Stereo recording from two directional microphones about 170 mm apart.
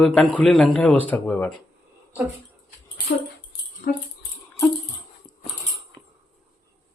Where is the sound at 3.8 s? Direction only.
55° left (ahead or behind).